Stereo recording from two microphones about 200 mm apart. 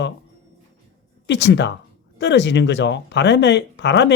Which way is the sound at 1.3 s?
60° left (ahead or behind).